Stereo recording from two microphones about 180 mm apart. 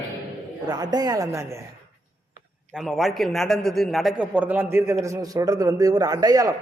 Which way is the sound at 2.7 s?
Centre (ahead or behind).